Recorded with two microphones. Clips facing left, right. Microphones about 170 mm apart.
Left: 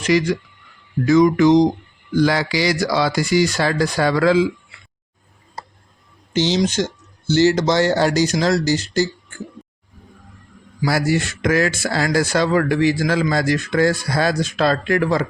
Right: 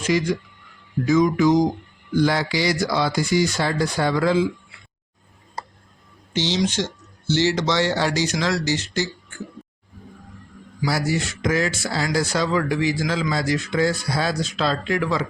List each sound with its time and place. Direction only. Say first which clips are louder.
0.0 s music: left 4 dB; 75° left (ahead or behind)
2.1 s speech: left 3 dB; 90° left
6.4 s speech: left 4 dB; 45° left (ahead or behind)
10.8 s speech: left 4 dB; 55° left (ahead or behind)